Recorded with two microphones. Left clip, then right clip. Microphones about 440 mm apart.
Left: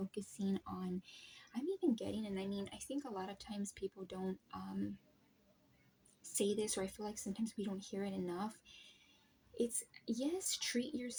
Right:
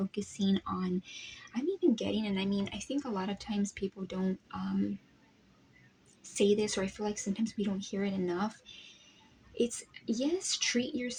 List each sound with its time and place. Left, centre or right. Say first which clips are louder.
0.1 s speech: right 9 dB; left
6.3 s speech: right 9 dB; left